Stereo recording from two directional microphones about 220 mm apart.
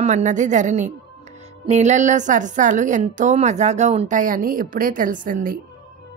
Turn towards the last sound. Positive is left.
turn(degrees=-40)  # may be behind; listen again after turning